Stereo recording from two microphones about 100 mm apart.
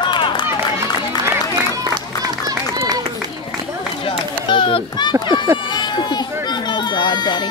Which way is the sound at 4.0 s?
60° left (ahead or behind).